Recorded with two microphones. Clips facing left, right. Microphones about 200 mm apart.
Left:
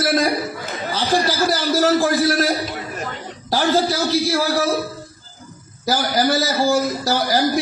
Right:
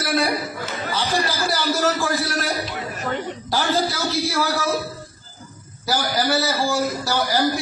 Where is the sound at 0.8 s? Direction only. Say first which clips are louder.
Left 4 dB; 35° left (ahead or behind).